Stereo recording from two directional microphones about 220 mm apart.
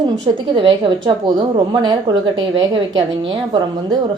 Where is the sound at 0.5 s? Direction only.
20° right (ahead or behind).